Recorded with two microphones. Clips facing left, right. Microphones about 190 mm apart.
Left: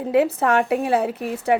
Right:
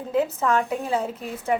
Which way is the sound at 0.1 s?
70° left (ahead or behind).